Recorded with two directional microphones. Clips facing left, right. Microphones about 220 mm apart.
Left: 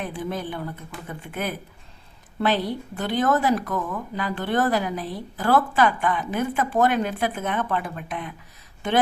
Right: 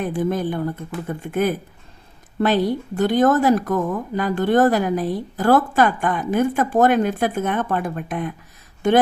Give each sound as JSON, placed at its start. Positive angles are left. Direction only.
{"t": 0.0, "sound": "speech", "side_deg": -45}